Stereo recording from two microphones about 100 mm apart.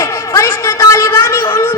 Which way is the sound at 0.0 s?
25° left (ahead or behind).